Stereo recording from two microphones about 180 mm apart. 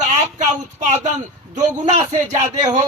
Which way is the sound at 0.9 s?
35° right (ahead or behind).